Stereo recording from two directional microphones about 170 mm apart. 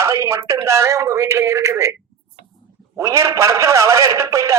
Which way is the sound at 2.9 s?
20° right (ahead or behind).